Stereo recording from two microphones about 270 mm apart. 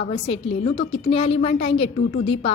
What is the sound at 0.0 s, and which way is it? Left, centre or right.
A woman's voice, left.